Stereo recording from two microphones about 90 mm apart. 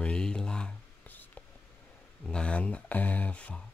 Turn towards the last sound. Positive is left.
turn(degrees=15)  # may be behind; listen again after turning